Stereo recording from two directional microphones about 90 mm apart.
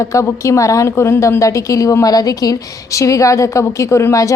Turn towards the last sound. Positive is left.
turn(degrees=35)  # may be behind; listen again after turning